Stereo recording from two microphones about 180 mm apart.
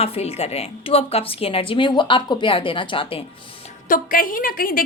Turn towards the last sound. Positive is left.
turn(degrees=55)  # may be behind; listen again after turning